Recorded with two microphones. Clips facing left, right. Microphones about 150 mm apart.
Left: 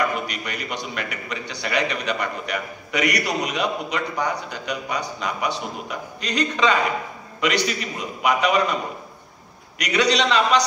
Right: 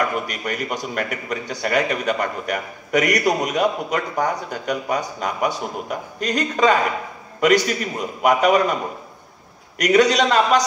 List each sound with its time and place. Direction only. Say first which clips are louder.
0.0 s a man's voice: right 1 dB; 45° right (ahead or behind)
9.8 s a man's voice: right 5 dB; 45° right (ahead or behind)